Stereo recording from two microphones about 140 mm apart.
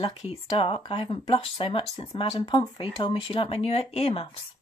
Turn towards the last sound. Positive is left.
turn(degrees=45)  # may be behind; listen again after turning